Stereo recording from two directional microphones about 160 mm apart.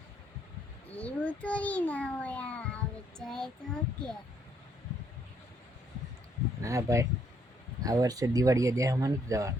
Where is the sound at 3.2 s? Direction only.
5° left (ahead or behind).